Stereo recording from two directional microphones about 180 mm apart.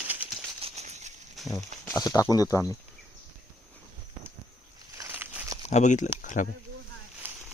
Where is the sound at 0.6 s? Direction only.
40° right (ahead or behind).